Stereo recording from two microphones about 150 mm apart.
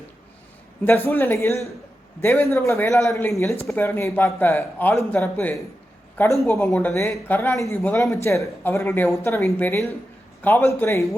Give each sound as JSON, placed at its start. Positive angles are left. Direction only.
{"t": 0.9, "sound": "speech", "side_deg": 15}